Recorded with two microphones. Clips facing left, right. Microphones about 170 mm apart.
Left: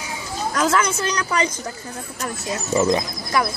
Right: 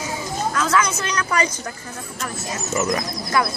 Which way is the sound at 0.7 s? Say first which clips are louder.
Even; 35° left (ahead or behind).